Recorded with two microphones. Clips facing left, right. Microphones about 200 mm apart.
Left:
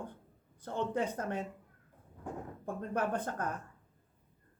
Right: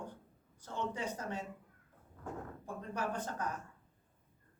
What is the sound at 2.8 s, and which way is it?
Speech, 55° left (ahead or behind).